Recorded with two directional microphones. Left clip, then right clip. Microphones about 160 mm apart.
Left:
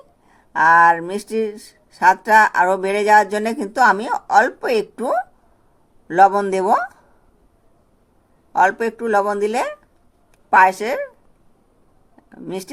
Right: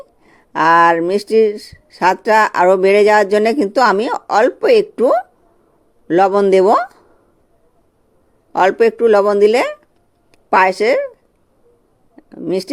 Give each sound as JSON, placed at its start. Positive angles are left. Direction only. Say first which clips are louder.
{"t": 0.5, "sound": "speech", "louder": "right 2 dB", "side_deg": -40}
{"t": 8.5, "sound": "speech", "louder": "right 4 dB", "side_deg": -40}
{"t": 12.4, "sound": "speech", "louder": "right 10 dB", "side_deg": -35}